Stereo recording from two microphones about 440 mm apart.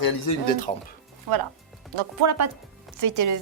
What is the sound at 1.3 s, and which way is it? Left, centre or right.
A woman's voice, right.